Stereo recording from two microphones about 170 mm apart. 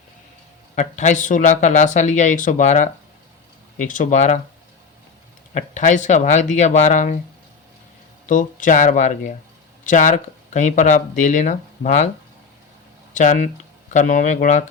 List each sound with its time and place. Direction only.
0.8 s speech: 45° left (ahead or behind)
5.5 s speech: 45° left (ahead or behind)
8.3 s speech: 50° left (ahead or behind)
13.1 s speech: 50° left (ahead or behind)